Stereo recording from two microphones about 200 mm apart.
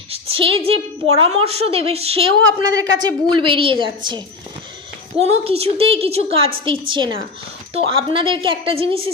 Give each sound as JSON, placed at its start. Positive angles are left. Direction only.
{"t": 0.1, "sound": "a woman's voice", "side_deg": -30}
{"t": 2.6, "sound": "speech", "side_deg": -20}